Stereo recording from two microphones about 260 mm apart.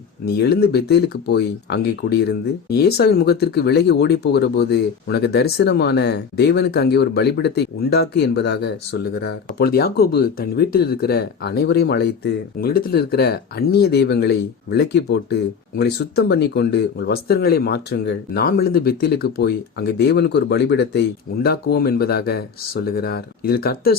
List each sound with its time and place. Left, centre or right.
0.3 s speech: left